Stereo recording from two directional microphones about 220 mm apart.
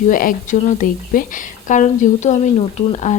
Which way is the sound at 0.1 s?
40° left (ahead or behind).